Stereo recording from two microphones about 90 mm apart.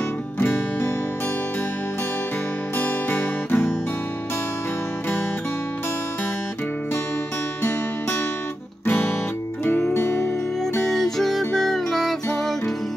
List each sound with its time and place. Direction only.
2.8 s music: 20° left (ahead or behind)
8.8 s music: 20° left (ahead or behind)
10.9 s music: 5° left (ahead or behind)